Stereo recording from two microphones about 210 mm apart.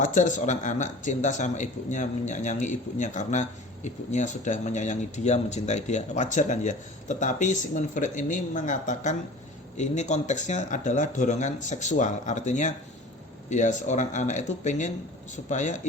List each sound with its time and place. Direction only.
0.0 s speech: 35° left (ahead or behind)